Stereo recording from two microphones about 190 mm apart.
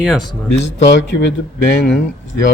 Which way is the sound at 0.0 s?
5° right (ahead or behind).